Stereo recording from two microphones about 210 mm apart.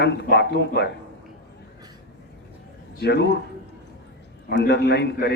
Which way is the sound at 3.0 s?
55° left (ahead or behind).